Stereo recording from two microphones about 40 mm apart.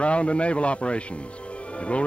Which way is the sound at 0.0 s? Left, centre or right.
Left.